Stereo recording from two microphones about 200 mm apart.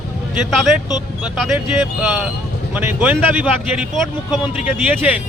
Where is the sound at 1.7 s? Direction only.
10° right (ahead or behind).